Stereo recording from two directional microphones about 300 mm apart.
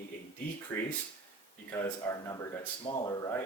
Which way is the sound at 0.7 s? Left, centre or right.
Centre.